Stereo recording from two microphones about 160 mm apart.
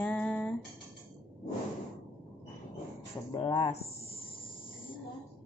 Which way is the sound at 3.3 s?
30° left (ahead or behind).